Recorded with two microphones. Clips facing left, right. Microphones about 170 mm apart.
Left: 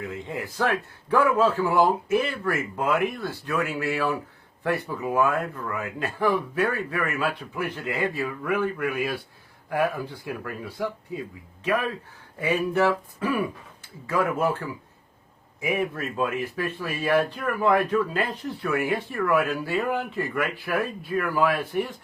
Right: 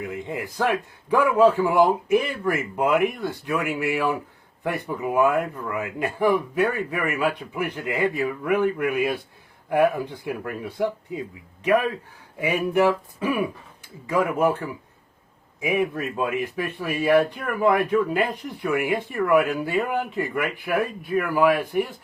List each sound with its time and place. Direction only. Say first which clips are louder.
0.0 s a man's voice: right 2 dB; 15° right (ahead or behind)